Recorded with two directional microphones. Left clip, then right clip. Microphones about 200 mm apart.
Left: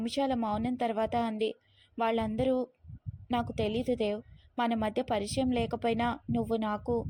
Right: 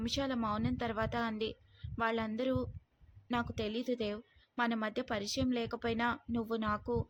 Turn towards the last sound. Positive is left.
turn(degrees=15)  # may be behind; listen again after turning